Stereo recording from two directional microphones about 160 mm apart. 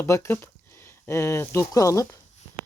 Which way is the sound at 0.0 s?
15° left (ahead or behind).